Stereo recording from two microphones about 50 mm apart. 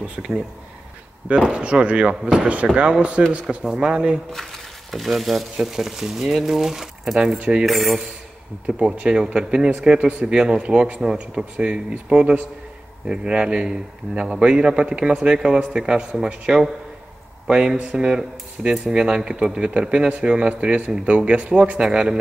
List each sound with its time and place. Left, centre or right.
0.0 s speech: right
1.5 s speech: right
3.4 s a man's voice: centre
4.3 s a man's voice: centre
7.3 s speech: right
7.6 s cutlery: centre
8.6 s a man's voice: right